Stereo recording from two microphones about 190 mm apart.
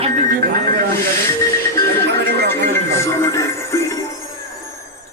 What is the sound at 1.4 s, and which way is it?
Music, 15° left (ahead or behind).